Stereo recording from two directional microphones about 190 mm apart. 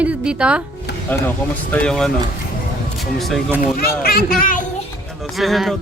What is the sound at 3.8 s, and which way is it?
Speech, 50° left (ahead or behind).